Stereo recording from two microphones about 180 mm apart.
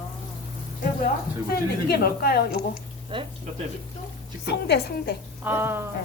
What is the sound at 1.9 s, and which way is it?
Speech, 60° left (ahead or behind).